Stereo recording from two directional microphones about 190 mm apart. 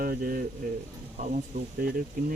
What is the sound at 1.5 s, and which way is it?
Speech, 40° right (ahead or behind).